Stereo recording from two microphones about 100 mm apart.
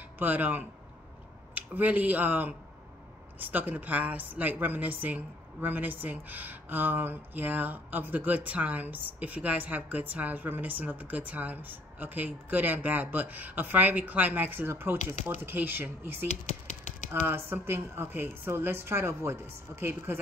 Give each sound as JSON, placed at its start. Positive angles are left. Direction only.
{"t": 0.2, "sound": "a woman's voice", "side_deg": -15}